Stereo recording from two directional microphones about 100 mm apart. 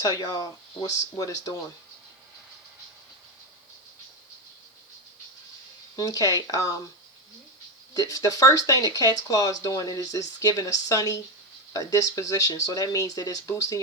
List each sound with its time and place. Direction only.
0.0 s speech: 35° left (ahead or behind)
6.0 s speech: 35° left (ahead or behind)
7.9 s speech: 35° left (ahead or behind)